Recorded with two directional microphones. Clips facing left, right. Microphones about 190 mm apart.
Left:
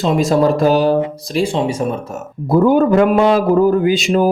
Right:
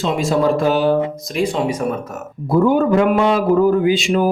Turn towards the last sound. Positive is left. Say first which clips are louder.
# left 2 dB
turn(degrees=40)  # may be behind; listen again after turning